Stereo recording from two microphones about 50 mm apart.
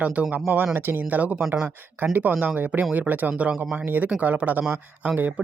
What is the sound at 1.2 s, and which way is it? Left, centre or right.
Speech, right.